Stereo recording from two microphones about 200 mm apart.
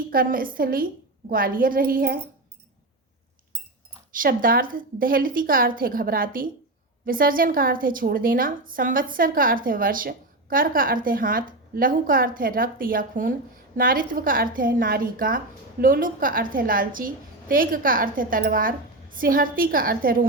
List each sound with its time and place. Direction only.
0.1 s a woman's voice: 45° right (ahead or behind)
4.1 s a woman's voice: 45° right (ahead or behind)